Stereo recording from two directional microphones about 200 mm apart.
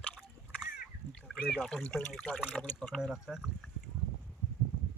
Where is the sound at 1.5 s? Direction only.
Centre (ahead or behind).